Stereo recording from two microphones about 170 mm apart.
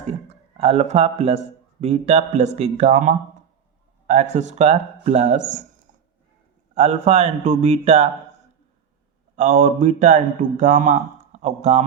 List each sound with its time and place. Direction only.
0.1 s speech: 35° right (ahead or behind)
6.7 s speech: 40° right (ahead or behind)
9.3 s a man's voice: 45° right (ahead or behind)